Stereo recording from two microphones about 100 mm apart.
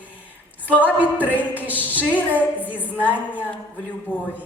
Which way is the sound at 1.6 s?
15° right (ahead or behind).